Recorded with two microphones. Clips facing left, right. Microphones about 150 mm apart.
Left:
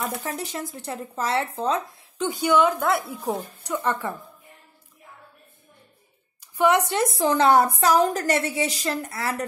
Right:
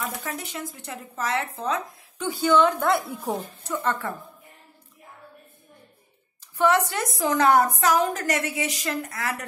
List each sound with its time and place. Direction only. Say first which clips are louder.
0.1 s speech: left 3 dB; 35° left (ahead or behind); by 2.7 s 15° left (ahead or behind)
3.1 s speech: left 1 dB; centre (ahead or behind)
3.6 s speech: left 2 dB; 15° left (ahead or behind)
6.4 s a woman's voice: left 1 dB; 15° left (ahead or behind); by 9.5 s 30° left (ahead or behind)